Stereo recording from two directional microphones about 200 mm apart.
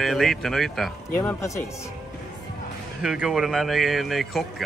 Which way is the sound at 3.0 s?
5° right (ahead or behind).